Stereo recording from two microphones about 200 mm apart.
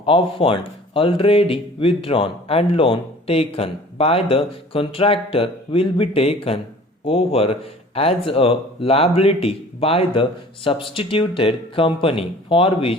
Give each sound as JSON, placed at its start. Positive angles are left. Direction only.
{"t": 0.0, "sound": "speech", "side_deg": 25}